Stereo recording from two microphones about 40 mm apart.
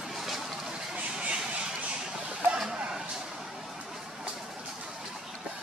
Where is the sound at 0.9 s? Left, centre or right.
Right.